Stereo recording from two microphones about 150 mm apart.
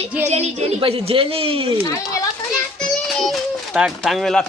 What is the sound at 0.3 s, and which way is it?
A woman's voice, 45° right (ahead or behind).